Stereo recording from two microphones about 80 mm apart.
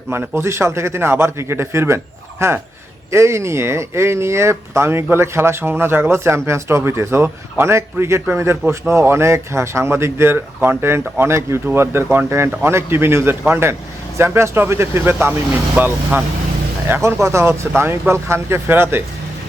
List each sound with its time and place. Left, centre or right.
0.1 s speech: right
16.9 s speech: right